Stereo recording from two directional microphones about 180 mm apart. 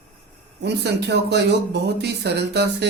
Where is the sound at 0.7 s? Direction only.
70° right (ahead or behind).